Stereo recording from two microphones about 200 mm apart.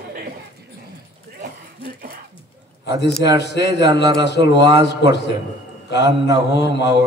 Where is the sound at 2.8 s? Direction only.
60° left (ahead or behind).